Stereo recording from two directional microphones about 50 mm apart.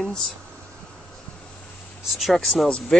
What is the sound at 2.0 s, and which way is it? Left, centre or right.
Speech, centre.